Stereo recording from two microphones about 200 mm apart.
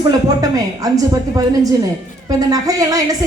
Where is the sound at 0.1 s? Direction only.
20° right (ahead or behind).